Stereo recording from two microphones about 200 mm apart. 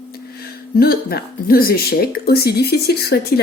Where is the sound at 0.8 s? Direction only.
50° left (ahead or behind).